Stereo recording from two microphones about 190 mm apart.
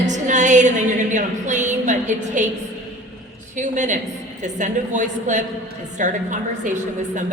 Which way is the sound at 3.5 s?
40° right (ahead or behind).